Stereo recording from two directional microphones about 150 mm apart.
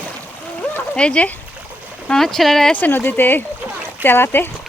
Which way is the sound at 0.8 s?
5° left (ahead or behind).